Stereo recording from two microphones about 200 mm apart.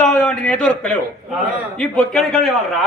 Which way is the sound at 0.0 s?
5° left (ahead or behind).